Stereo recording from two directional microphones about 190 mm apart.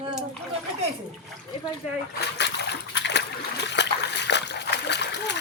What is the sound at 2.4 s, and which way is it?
Splash, 65° left (ahead or behind).